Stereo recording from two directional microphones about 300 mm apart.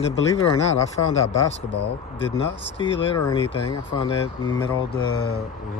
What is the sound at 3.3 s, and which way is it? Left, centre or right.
Speech, centre.